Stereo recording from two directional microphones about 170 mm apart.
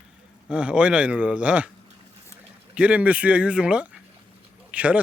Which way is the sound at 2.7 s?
10° right (ahead or behind).